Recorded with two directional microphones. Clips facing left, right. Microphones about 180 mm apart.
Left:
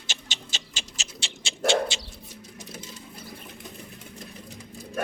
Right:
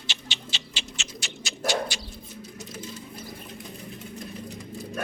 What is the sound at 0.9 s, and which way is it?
Bird, 35° left (ahead or behind).